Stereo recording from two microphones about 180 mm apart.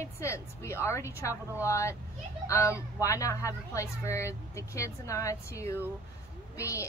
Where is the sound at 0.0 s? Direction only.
15° left (ahead or behind).